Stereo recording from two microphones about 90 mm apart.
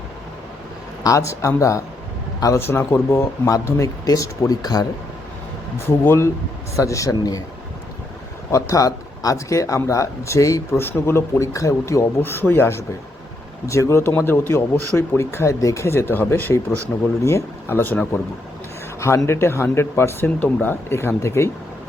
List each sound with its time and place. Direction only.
1.0 s speech: 35° left (ahead or behind)
6.1 s speech: 30° left (ahead or behind)
8.4 s speech: 35° left (ahead or behind)
18.9 s speech: 30° left (ahead or behind)